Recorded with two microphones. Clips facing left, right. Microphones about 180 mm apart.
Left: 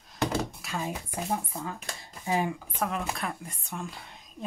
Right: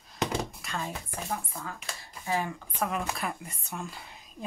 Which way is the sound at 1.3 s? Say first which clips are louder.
Left 3 dB; 20° left (ahead or behind).